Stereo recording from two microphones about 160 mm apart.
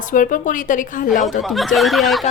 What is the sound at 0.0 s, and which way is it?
Speech, 55° left (ahead or behind).